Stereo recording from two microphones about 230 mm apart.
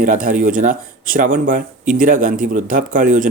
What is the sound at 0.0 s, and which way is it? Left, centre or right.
Speech, right.